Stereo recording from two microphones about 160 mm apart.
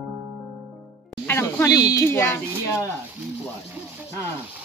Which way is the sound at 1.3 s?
15° left (ahead or behind).